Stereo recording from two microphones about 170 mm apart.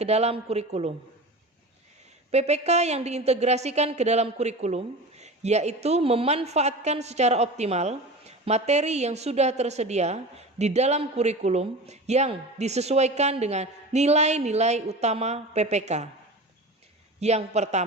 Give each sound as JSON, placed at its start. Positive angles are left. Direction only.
{"t": 0.0, "sound": "a woman's voice", "side_deg": -40}
{"t": 2.3, "sound": "a woman's voice", "side_deg": -40}
{"t": 17.2, "sound": "a woman's voice", "side_deg": -40}